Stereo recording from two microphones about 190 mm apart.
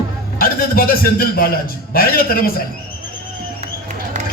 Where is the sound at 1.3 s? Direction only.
50° left (ahead or behind).